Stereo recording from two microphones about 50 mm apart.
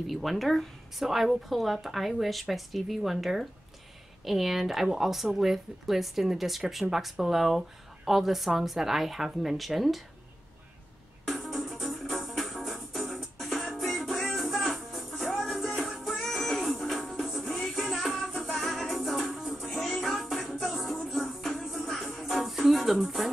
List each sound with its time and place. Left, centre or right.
0.0 s speech: centre
11.2 s music: centre